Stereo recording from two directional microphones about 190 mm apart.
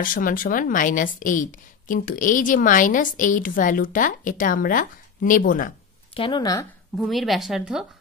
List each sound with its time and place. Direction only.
0.0 s speech: 45° left (ahead or behind)
6.1 s speech: 25° left (ahead or behind)
7.0 s speech: centre (ahead or behind)